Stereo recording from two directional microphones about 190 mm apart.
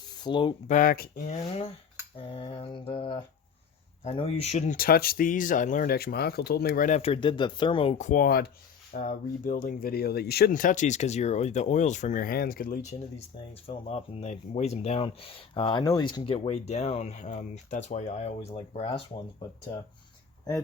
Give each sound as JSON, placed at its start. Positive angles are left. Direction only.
{"t": 0.1, "sound": "a sound", "side_deg": 25}
{"t": 0.7, "sound": "speech", "side_deg": 45}
{"t": 1.3, "sound": "speech", "side_deg": 35}
{"t": 2.1, "sound": "mantra", "side_deg": 30}
{"t": 4.0, "sound": "speech", "side_deg": 30}
{"t": 4.8, "sound": "speech", "side_deg": 50}
{"t": 18.8, "sound": "mantra", "side_deg": 30}